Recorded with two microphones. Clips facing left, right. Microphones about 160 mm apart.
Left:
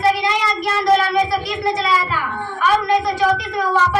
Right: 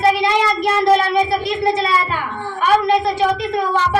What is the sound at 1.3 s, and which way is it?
Speech, 25° right (ahead or behind).